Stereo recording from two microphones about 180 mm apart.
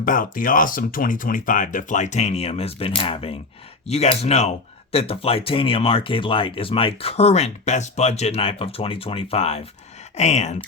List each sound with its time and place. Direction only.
0.0 s speech: 50° left (ahead or behind)